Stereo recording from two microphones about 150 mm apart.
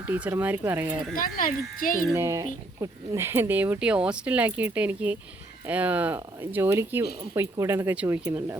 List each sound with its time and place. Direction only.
0.1 s speech: 15° right (ahead or behind)
1.1 s speech: 65° left (ahead or behind)
2.1 s speech: 20° right (ahead or behind)